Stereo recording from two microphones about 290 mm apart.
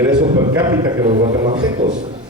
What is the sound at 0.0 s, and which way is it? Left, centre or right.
A man's voice, centre.